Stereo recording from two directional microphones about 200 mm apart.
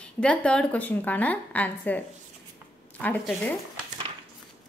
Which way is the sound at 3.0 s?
5° left (ahead or behind).